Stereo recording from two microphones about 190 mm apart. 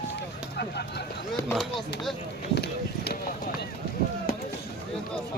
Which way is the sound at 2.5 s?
60° left (ahead or behind).